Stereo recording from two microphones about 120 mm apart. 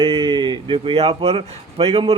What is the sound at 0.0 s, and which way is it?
A man's voice, 50° right (ahead or behind).